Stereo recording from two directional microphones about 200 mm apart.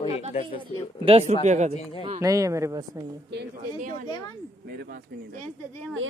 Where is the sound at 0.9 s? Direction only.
30° right (ahead or behind).